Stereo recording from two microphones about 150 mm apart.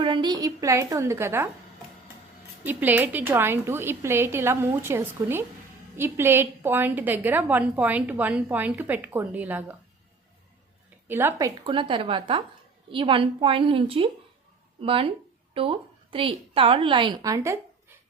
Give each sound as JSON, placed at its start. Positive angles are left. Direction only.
{"t": 0.0, "sound": "a woman's voice", "side_deg": -30}
{"t": 2.6, "sound": "a woman's voice", "side_deg": -10}
{"t": 11.1, "sound": "a woman's voice", "side_deg": -15}
{"t": 11.6, "sound": "a woman's voice", "side_deg": -35}